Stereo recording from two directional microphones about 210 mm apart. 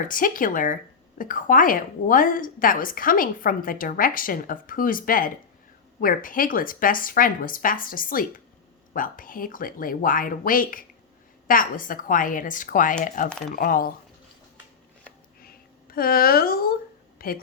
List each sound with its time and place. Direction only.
0.0 s a woman's voice: 40° left (ahead or behind)
15.4 s a sound: 45° left (ahead or behind)
17.2 s speech: 45° left (ahead or behind)